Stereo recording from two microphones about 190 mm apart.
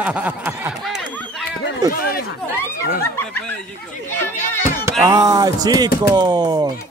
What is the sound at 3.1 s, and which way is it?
Snicker, 10° left (ahead or behind).